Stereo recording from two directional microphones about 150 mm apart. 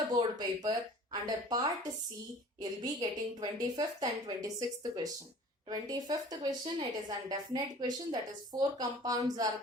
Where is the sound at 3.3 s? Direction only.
25° right (ahead or behind).